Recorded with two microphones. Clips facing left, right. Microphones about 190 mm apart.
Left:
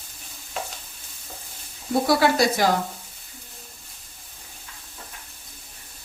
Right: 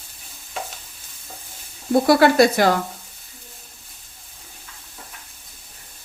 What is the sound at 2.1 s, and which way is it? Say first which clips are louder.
Speech: right 6 dB; 60° right (ahead or behind).